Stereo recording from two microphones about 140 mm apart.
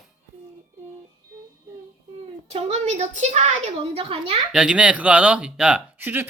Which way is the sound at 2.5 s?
50° right (ahead or behind).